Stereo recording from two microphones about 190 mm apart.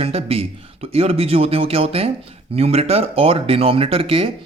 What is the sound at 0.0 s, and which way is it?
Speech, 30° right (ahead or behind).